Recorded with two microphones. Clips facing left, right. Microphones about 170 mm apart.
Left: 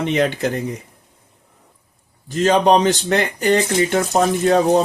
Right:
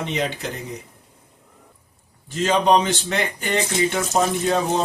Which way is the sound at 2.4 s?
40° left (ahead or behind).